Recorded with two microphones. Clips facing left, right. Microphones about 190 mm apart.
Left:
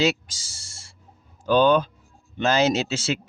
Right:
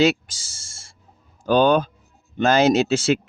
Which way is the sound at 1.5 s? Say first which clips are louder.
Right 1 dB; 50° right (ahead or behind).